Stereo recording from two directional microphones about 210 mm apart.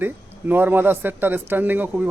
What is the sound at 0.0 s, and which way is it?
Speech, 10° right (ahead or behind).